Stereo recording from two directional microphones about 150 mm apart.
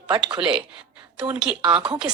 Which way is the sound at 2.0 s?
25° right (ahead or behind).